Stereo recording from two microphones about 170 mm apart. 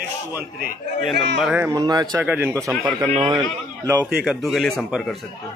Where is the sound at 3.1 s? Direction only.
30° right (ahead or behind).